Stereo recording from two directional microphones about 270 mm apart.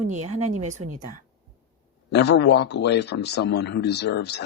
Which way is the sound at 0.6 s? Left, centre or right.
Right.